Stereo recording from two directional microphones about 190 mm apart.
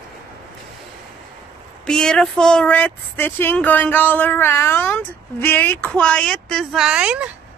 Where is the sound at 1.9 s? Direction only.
5° left (ahead or behind).